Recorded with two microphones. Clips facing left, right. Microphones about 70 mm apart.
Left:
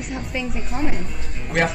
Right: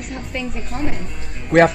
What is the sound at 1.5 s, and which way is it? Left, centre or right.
Speech, right.